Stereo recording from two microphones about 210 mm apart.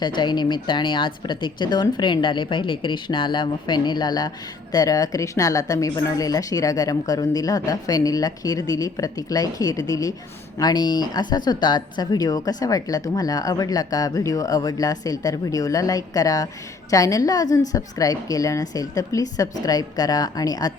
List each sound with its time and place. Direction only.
0.2 s a woman's voice: 20° left (ahead or behind)